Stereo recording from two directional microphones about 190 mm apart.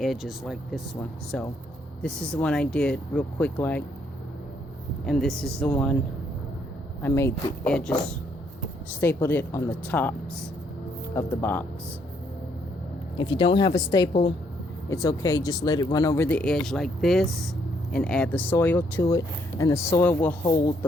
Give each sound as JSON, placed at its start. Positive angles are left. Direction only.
{"t": 0.0, "sound": "speech", "side_deg": 0}
{"t": 2.0, "sound": "speech", "side_deg": 5}
{"t": 5.0, "sound": "speech", "side_deg": 0}
{"t": 7.0, "sound": "speech", "side_deg": 10}
{"t": 9.0, "sound": "speech", "side_deg": 10}
{"t": 13.1, "sound": "speech", "side_deg": 25}
{"t": 14.1, "sound": "a woman's voice", "side_deg": 35}
{"t": 14.8, "sound": "speech", "side_deg": 15}